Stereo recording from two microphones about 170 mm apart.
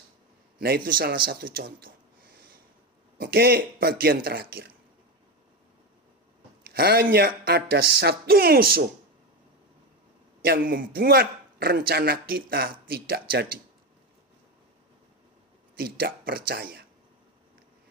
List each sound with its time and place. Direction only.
0.9 s a man's voice: 60° right (ahead or behind)
2.3 s snort: 60° right (ahead or behind)
3.2 s a man's voice: 65° right (ahead or behind)
6.7 s a man's voice: 65° right (ahead or behind)
10.4 s a man's voice: 65° right (ahead or behind)
15.8 s a man's voice: 60° right (ahead or behind)